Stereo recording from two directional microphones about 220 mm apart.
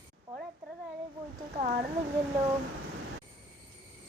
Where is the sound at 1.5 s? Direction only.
40° right (ahead or behind).